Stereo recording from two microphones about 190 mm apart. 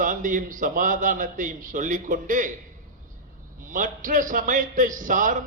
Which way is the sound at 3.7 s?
45° right (ahead or behind).